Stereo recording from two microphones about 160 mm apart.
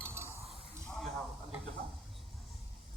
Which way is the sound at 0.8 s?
5° left (ahead or behind).